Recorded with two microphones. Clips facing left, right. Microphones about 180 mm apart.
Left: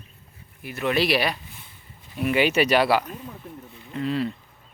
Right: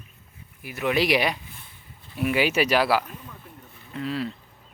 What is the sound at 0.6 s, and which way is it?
Speech, 10° right (ahead or behind).